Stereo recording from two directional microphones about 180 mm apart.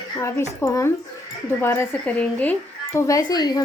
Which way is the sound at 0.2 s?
15° left (ahead or behind).